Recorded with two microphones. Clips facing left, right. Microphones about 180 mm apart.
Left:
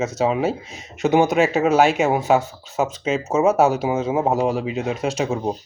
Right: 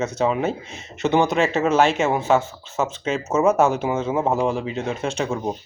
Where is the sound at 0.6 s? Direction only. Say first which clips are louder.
Right 1 dB; 40° left (ahead or behind).